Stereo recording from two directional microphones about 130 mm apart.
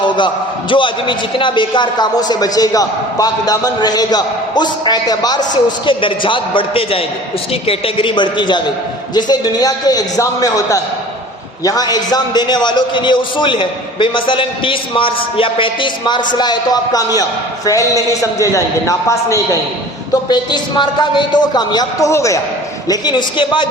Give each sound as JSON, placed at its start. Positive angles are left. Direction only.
{"t": 0.7, "sound": "a man's voice", "side_deg": 40}
{"t": 20.2, "sound": "a man's voice", "side_deg": 35}
{"t": 22.9, "sound": "a man's voice", "side_deg": 35}